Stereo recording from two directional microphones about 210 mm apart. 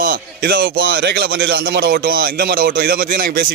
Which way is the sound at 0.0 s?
45° right (ahead or behind).